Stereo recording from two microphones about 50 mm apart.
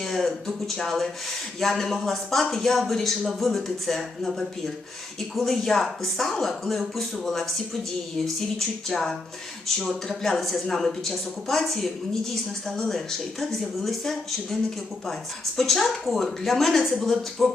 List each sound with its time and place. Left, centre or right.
0.0 s speech: centre